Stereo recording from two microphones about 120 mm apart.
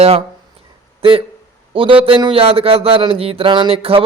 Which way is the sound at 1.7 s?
50° right (ahead or behind).